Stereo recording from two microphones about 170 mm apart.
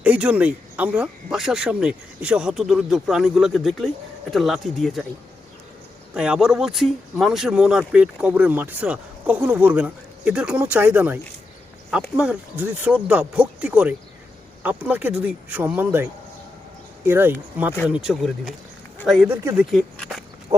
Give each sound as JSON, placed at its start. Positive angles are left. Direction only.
{"t": 0.0, "sound": "speech", "side_deg": -10}
{"t": 6.1, "sound": "speech", "side_deg": -5}
{"t": 17.1, "sound": "speech", "side_deg": -10}
{"t": 19.3, "sound": "speech", "side_deg": -10}
{"t": 19.7, "sound": "a sound", "side_deg": 0}
{"t": 20.5, "sound": "livestock", "side_deg": -35}